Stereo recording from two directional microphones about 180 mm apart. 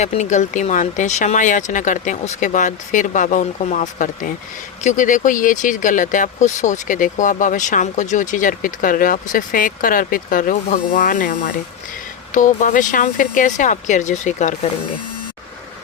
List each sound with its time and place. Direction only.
0.0 s speech: 40° left (ahead or behind)
12.3 s speech: 45° left (ahead or behind)